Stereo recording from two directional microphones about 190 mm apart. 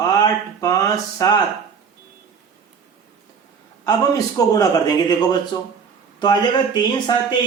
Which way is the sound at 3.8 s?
20° left (ahead or behind).